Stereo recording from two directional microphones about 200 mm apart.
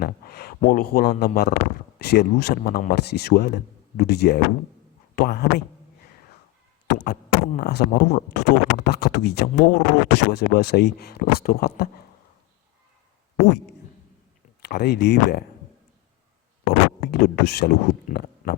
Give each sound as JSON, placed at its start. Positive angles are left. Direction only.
{"t": 0.0, "sound": "speech", "side_deg": 50}
{"t": 6.8, "sound": "speech", "side_deg": 55}
{"t": 14.6, "sound": "speech", "side_deg": 55}
{"t": 17.0, "sound": "speech", "side_deg": 50}